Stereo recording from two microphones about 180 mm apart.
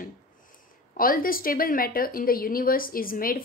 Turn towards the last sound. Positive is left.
turn(degrees=55)  # may be behind; listen again after turning